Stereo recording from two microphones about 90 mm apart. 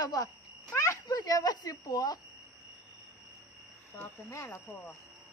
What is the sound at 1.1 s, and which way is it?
Speech, 50° left (ahead or behind).